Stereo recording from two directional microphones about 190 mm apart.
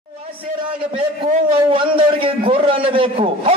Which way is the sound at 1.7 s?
30° right (ahead or behind).